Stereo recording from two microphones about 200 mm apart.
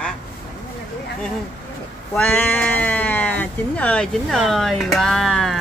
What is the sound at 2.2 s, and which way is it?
Speech, 10° left (ahead or behind).